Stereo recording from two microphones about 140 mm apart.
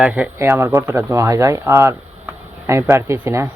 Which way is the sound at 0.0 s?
10° right (ahead or behind).